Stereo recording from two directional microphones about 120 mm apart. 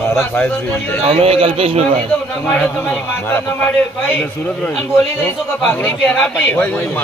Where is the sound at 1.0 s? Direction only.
55° right (ahead or behind).